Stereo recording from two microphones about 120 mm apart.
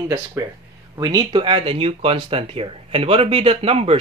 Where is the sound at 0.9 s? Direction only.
35° right (ahead or behind).